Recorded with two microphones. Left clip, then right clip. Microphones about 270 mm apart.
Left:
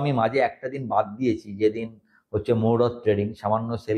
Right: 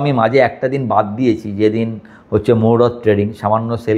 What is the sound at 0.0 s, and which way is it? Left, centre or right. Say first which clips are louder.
Speech: right 9 dB; left.